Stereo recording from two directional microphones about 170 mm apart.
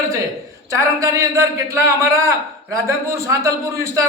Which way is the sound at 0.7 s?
20° right (ahead or behind).